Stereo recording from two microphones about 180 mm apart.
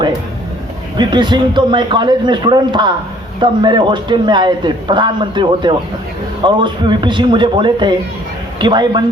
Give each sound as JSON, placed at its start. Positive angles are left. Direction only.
{"t": 0.9, "sound": "a man's voice", "side_deg": -25}